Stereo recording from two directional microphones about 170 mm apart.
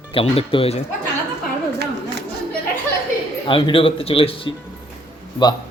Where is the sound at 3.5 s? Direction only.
30° left (ahead or behind).